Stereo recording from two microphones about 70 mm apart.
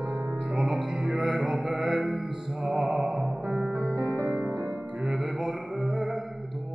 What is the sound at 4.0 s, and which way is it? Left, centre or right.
Music, right.